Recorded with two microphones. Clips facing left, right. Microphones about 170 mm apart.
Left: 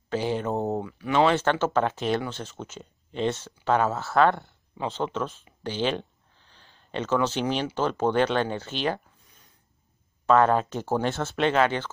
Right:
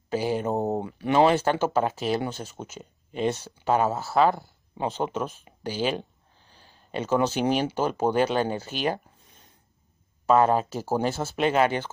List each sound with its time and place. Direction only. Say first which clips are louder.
0.1 s speech: right 1 dB; 10° right (ahead or behind)
0.7 s speech: right 3 dB; 25° right (ahead or behind)
1.3 s speech: even; 10° right (ahead or behind)
6.5 s a sound: right 1 dB; 10° right (ahead or behind)
7.7 s speech: even; 10° right (ahead or behind)
10.2 s speech: even; 10° right (ahead or behind)